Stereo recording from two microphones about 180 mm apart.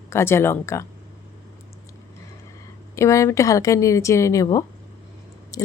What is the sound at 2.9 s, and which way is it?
Speech, 15° left (ahead or behind).